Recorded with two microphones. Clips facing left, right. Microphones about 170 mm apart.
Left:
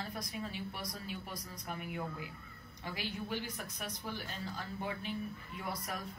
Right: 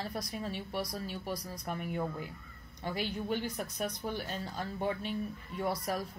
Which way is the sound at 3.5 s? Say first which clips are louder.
Right 8 dB; 40° right (ahead or behind).